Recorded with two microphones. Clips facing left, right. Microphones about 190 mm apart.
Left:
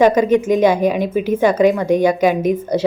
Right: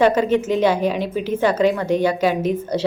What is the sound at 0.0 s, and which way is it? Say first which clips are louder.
Speech: left 4 dB; 10° left (ahead or behind).